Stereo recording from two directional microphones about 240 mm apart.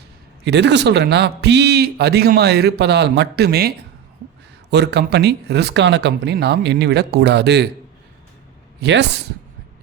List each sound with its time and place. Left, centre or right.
0.4 s a man's voice: right
8.8 s a man's voice: right